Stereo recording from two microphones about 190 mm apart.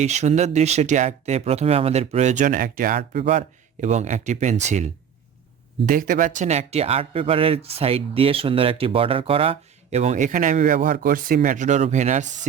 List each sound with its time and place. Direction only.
0.0 s speech: 35° right (ahead or behind)
3.2 s speech: 35° right (ahead or behind)